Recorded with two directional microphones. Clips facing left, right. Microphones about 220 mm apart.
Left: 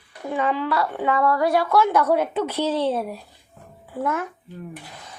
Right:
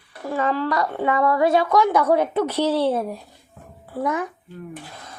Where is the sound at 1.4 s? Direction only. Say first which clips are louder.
Right 3 dB; 20° right (ahead or behind).